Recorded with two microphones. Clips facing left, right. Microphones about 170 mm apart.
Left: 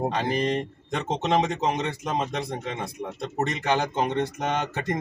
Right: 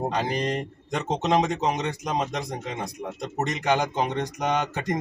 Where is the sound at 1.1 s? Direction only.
15° right (ahead or behind).